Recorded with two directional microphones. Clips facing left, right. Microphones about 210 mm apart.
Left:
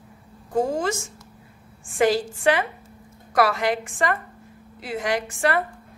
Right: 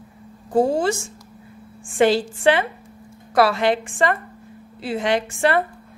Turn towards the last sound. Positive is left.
turn(degrees=-25)  # may be behind; listen again after turning